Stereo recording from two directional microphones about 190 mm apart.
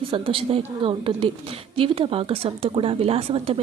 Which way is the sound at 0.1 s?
30° right (ahead or behind).